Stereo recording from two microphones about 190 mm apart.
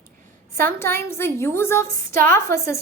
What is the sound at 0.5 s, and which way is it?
A woman's voice, 15° left (ahead or behind).